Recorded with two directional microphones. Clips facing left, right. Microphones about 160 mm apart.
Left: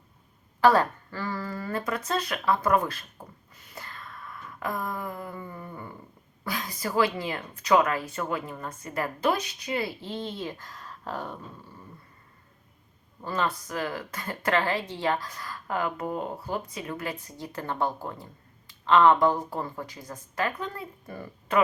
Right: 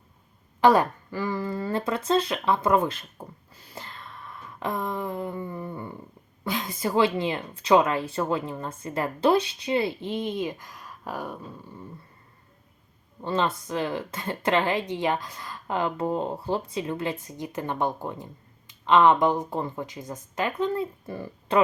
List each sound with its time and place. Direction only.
0.6 s speech: 15° right (ahead or behind)
3.5 s gasp: 30° right (ahead or behind)
6.4 s speech: 20° right (ahead or behind)
13.2 s speech: 25° right (ahead or behind)